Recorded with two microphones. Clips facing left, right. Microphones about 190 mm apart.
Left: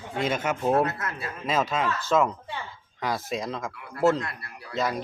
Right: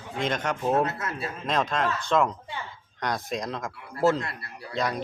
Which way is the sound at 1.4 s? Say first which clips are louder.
Left 1 dB; 5° left (ahead or behind).